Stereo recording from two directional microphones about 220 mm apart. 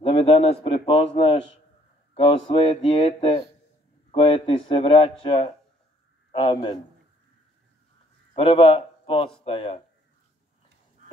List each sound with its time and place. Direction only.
0.0 s a man's voice: 25° left (ahead or behind)
8.4 s a man's voice: 25° left (ahead or behind)
11.0 s a sound: 35° right (ahead or behind)